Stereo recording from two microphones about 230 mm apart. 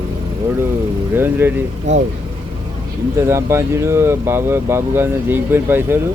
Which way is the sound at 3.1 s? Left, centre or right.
Centre.